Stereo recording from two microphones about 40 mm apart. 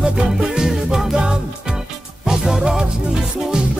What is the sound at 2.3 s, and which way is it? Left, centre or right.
Music, centre.